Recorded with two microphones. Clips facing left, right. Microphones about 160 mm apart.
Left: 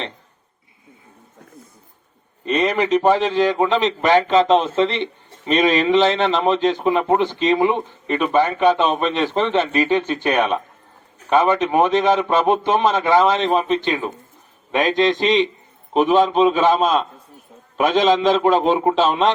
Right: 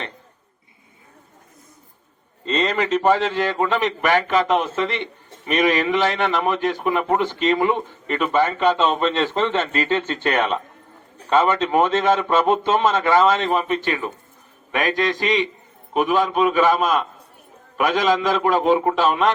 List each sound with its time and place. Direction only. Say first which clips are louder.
2.4 s a man's voice: left 3 dB; 15° left (ahead or behind)